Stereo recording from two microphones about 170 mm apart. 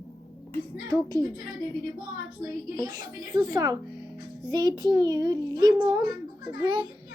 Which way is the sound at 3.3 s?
25° right (ahead or behind).